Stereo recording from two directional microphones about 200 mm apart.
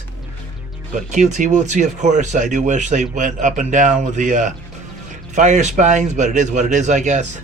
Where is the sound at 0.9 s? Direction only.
35° right (ahead or behind).